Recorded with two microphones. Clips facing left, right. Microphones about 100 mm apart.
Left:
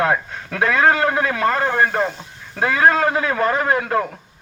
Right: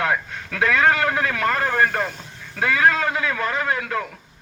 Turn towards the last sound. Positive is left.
turn(degrees=35)  # may be behind; listen again after turning